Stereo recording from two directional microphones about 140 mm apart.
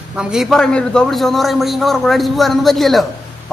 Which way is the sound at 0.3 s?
Centre (ahead or behind).